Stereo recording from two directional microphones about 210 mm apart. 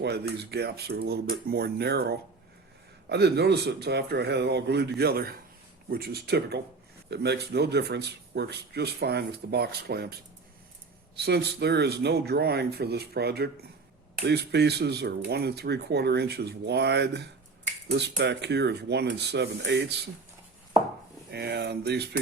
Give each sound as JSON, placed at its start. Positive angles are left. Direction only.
{"t": 0.0, "sound": "speech", "side_deg": -50}
{"t": 11.2, "sound": "speech", "side_deg": -50}
{"t": 21.2, "sound": "speech", "side_deg": -55}